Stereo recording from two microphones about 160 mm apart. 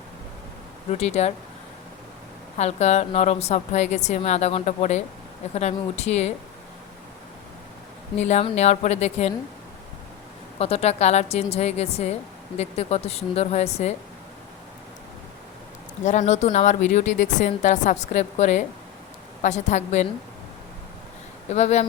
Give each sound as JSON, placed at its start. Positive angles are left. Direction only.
{"t": 0.9, "sound": "a woman's voice", "side_deg": 45}
{"t": 2.6, "sound": "a woman's voice", "side_deg": 45}
{"t": 8.2, "sound": "a woman's voice", "side_deg": 40}
{"t": 10.6, "sound": "a woman's voice", "side_deg": 40}
{"t": 16.0, "sound": "a woman's voice", "side_deg": 45}
{"t": 21.5, "sound": "a woman's voice", "side_deg": 45}